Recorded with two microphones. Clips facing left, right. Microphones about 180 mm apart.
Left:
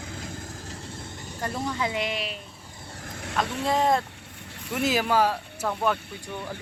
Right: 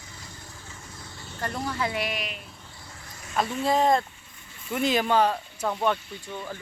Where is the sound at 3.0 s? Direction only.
60° left (ahead or behind).